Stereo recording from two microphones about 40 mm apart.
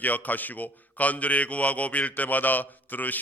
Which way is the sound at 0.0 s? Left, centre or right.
Left.